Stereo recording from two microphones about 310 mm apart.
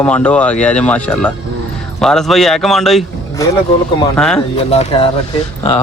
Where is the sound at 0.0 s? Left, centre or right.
Centre.